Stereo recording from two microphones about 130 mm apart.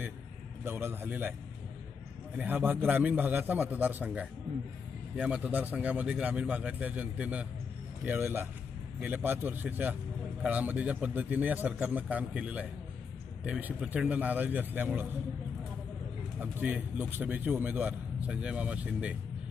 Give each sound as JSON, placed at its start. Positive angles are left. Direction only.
{"t": 0.6, "sound": "a man's voice", "side_deg": -20}
{"t": 2.3, "sound": "a man's voice", "side_deg": -10}
{"t": 16.4, "sound": "a man's voice", "side_deg": -10}